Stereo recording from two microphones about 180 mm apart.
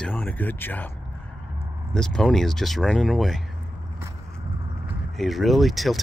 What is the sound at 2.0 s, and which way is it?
Speech, 5° left (ahead or behind).